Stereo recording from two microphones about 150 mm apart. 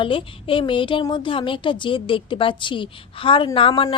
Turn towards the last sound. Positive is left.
turn(degrees=35)  # may be behind; listen again after turning